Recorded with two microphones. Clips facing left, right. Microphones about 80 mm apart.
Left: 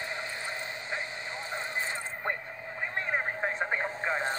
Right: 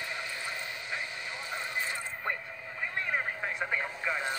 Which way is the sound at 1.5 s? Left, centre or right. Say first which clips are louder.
Left 1 dB; left.